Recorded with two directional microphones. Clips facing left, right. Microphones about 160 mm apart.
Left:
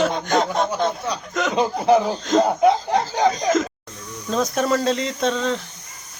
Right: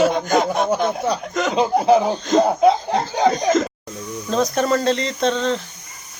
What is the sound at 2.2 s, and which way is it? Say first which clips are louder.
Speech: right 2 dB; centre (ahead or behind).